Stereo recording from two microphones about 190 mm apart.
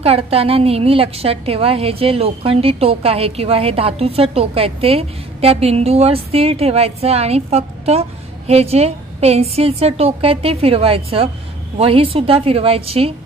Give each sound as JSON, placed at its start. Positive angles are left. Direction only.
{"t": 0.0, "sound": "a woman's voice", "side_deg": -30}